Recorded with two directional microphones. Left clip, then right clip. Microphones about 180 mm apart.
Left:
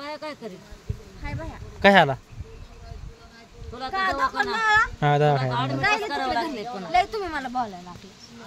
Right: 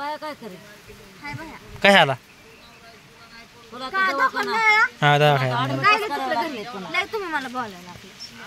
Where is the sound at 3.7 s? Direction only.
50° right (ahead or behind).